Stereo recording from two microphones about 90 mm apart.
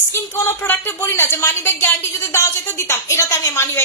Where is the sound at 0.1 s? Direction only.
30° left (ahead or behind).